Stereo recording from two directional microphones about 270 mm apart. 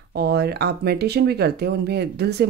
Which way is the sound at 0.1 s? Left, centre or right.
Right.